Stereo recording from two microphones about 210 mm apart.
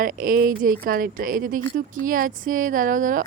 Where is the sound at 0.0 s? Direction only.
40° right (ahead or behind).